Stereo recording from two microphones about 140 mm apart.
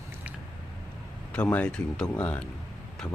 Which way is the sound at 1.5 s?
5° left (ahead or behind).